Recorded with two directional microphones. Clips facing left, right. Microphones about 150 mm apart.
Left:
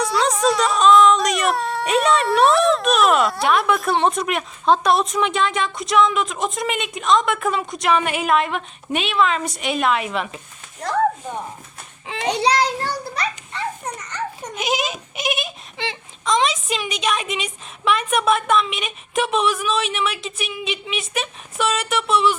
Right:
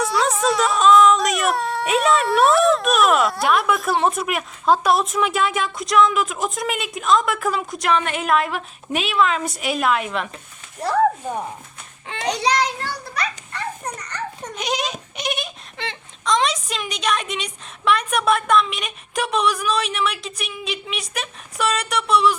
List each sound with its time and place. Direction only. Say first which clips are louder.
0.0 s speech: left 1 dB; centre (ahead or behind)
12.0 s a child's voice: left 2 dB; centre (ahead or behind)
12.3 s a child's voice: left 2 dB; 30° left (ahead or behind)
14.1 s a child's voice: left 2 dB; 10° left (ahead or behind)